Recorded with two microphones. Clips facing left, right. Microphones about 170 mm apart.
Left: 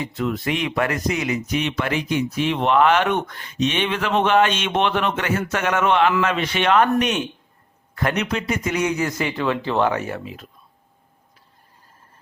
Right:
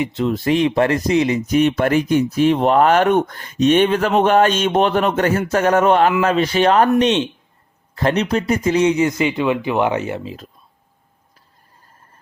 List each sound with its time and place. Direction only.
0.2 s speech: 30° right (ahead or behind)
1.5 s speech: 45° right (ahead or behind); by 10.3 s 20° right (ahead or behind)